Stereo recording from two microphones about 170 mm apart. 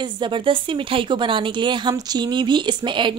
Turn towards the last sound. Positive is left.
turn(degrees=-30)  # may be behind; listen again after turning